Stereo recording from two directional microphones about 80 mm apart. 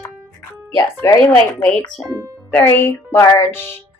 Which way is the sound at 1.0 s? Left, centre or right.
Left.